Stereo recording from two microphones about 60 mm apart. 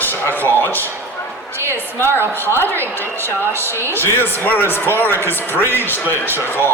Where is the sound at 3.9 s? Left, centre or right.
Left.